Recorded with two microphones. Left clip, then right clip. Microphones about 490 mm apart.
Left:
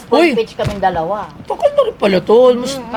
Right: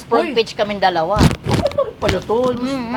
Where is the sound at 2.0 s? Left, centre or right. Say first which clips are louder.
Left 9 dB; left.